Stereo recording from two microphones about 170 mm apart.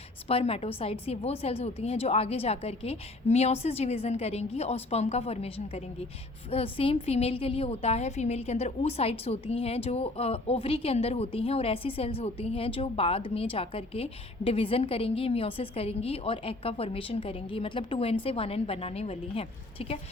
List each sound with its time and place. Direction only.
0.3 s a woman's voice: 35° left (ahead or behind)